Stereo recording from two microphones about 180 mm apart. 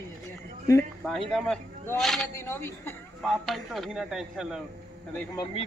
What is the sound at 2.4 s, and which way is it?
Speech, 15° left (ahead or behind).